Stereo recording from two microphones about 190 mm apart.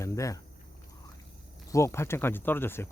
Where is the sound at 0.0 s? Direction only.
15° left (ahead or behind).